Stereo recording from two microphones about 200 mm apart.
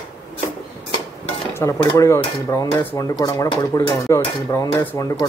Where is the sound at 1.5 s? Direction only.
15° left (ahead or behind).